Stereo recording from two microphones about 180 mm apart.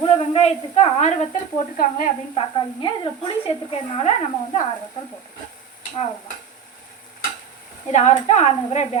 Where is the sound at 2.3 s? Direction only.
30° left (ahead or behind).